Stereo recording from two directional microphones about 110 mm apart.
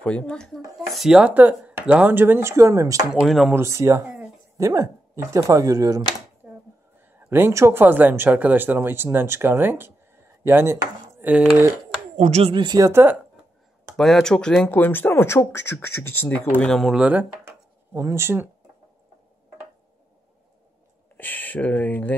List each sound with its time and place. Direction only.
0.0 s speech: 10° left (ahead or behind); by 3.1 s 30° right (ahead or behind)
3.1 s speech: 5° right (ahead or behind)
3.5 s speech: 25° right (ahead or behind)
6.4 s a sound: 15° right (ahead or behind)
7.2 s speech: 20° right (ahead or behind)
11.3 s speech: 10° right (ahead or behind)
12.2 s speech: 85° right
12.5 s speech: 45° right (ahead or behind)
12.8 s speech: 20° right (ahead or behind)
13.9 s speech: 5° left (ahead or behind)
14.7 s speech: 20° left (ahead or behind); by 17.0 s centre (ahead or behind)
17.0 s speech: 15° right (ahead or behind)
21.2 s speech: 15° left (ahead or behind)